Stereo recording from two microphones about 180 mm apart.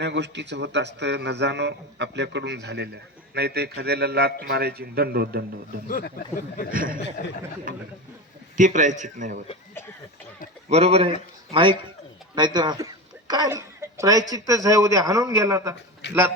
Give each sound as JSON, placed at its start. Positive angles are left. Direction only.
{"t": 0.0, "sound": "a man's voice", "side_deg": -75}
{"t": 5.9, "sound": "speech", "side_deg": 50}
{"t": 6.7, "sound": "a man's voice", "side_deg": -50}
{"t": 8.5, "sound": "a man's voice", "side_deg": -45}
{"t": 10.7, "sound": "a man's voice", "side_deg": -35}
{"t": 16.0, "sound": "a sound", "side_deg": 70}